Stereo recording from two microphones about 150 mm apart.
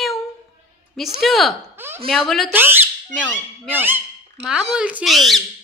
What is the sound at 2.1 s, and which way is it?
Speech, centre (ahead or behind).